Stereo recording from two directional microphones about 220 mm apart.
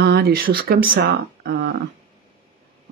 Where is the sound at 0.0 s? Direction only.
45° right (ahead or behind).